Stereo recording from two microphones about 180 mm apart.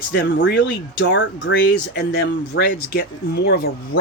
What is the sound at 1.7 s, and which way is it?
Speech, 60° left (ahead or behind).